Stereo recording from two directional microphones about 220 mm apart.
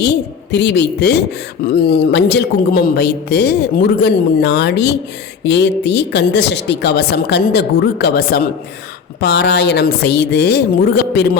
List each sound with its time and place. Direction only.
0.5 s a man's voice: 50° left (ahead or behind)